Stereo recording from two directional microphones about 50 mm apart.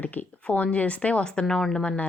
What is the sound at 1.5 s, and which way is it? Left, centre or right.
Speech, centre.